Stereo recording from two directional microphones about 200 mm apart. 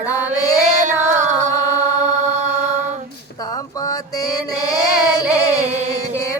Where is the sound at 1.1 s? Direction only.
35° right (ahead or behind).